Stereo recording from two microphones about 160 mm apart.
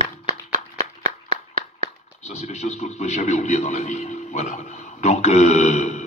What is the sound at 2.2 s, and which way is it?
A man's voice, 45° left (ahead or behind).